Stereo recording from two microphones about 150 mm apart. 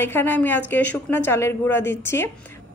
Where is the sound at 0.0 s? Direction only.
15° left (ahead or behind).